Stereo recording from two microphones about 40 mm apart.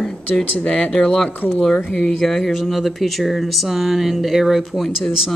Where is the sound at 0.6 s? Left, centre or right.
Left.